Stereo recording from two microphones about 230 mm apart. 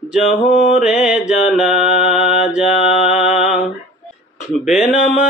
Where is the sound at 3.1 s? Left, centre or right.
Left.